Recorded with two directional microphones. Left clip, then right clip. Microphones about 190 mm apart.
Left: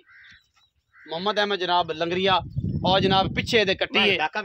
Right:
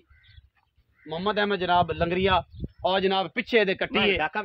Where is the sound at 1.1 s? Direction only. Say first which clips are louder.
Left 2 dB; 55° left (ahead or behind).